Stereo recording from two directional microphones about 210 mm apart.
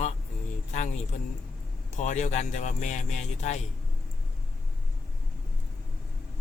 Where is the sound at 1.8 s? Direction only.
35° left (ahead or behind).